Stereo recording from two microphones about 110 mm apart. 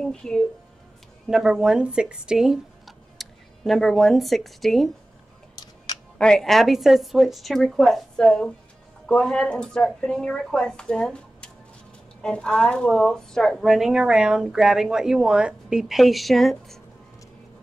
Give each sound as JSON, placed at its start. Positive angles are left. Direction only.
{"t": 0.0, "sound": "a woman's voice", "side_deg": 5}
{"t": 1.2, "sound": "speech", "side_deg": -5}
{"t": 6.1, "sound": "a woman's voice", "side_deg": 5}